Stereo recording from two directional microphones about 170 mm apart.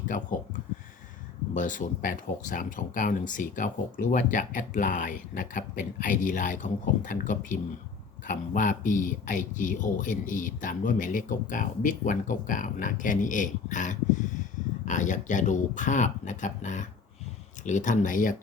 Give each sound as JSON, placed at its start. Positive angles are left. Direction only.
{"t": 0.1, "sound": "speech", "side_deg": 50}